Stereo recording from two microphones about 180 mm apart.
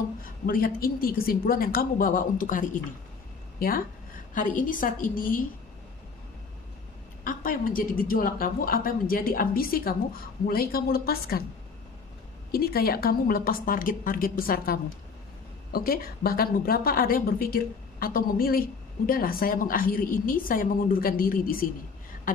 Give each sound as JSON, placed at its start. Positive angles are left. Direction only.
{"t": 0.5, "sound": "a woman's voice", "side_deg": 50}
{"t": 7.2, "sound": "a woman's voice", "side_deg": 50}
{"t": 12.4, "sound": "a woman's voice", "side_deg": 55}